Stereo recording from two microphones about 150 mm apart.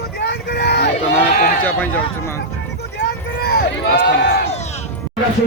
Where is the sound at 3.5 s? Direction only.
90° left.